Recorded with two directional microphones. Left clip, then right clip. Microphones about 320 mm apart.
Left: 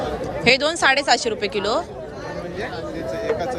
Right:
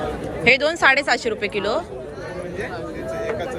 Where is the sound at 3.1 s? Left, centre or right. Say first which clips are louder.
Left 2 dB; left.